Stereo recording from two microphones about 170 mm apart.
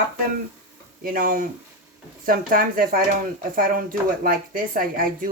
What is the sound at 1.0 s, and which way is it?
Speech, 55° right (ahead or behind).